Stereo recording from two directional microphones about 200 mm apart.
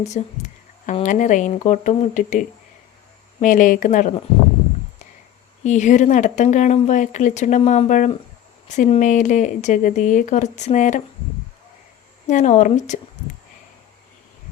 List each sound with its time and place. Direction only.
0.0 s speech: 35° left (ahead or behind)
3.4 s speech: 40° left (ahead or behind)
5.6 s speech: 35° left (ahead or behind)
12.3 s speech: 40° left (ahead or behind)